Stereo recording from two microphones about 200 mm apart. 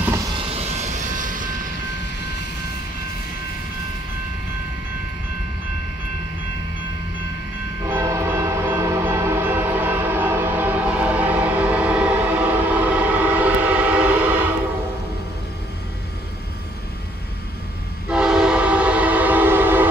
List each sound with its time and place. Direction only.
0.4 s vehicle: 30° right (ahead or behind)
7.8 s train: 15° right (ahead or behind)
18.0 s train: 5° right (ahead or behind)